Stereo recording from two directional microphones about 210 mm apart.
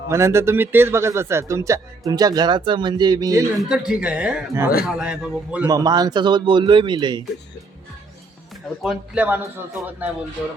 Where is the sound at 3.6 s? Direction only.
5° right (ahead or behind).